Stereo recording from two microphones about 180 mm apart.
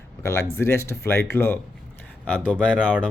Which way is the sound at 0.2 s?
15° left (ahead or behind).